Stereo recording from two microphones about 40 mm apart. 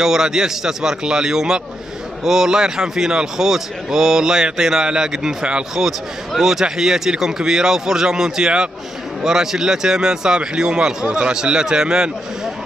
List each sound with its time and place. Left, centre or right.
0.0 s speech: centre
5.9 s speech: centre